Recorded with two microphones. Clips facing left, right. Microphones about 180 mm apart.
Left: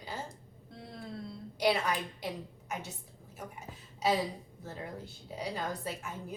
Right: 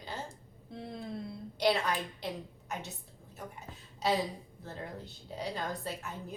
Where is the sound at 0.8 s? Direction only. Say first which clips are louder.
Right 3 dB; 20° right (ahead or behind).